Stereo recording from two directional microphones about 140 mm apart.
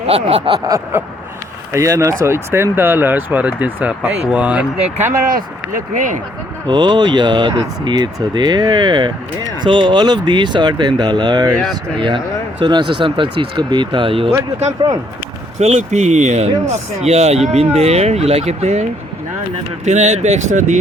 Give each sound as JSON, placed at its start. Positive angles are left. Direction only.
{"t": 0.1, "sound": "speech", "side_deg": -45}
{"t": 0.9, "sound": "speech", "side_deg": -15}
{"t": 5.2, "sound": "speech", "side_deg": -80}
{"t": 6.7, "sound": "speech", "side_deg": -30}
{"t": 15.5, "sound": "speech", "side_deg": -50}